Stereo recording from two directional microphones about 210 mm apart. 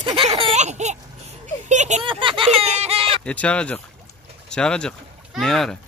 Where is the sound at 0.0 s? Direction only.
25° right (ahead or behind).